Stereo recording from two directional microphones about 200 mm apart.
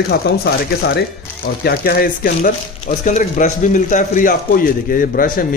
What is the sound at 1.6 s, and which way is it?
Speech, 50° left (ahead or behind).